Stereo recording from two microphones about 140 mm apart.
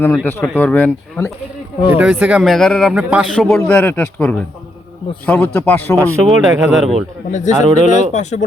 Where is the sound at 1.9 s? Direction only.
10° right (ahead or behind).